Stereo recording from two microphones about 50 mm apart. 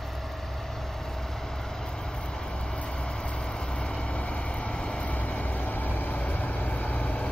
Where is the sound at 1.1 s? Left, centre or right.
Centre.